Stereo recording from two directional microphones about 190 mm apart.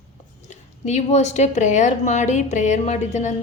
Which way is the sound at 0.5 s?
35° left (ahead or behind).